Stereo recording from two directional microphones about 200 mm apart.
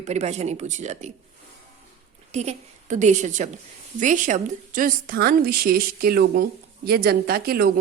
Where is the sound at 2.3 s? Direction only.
35° right (ahead or behind).